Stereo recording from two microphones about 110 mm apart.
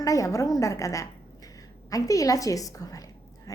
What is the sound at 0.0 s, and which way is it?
A woman's voice, 30° left (ahead or behind).